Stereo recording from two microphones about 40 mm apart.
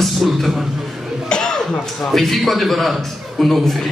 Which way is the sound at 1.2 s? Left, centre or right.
Centre.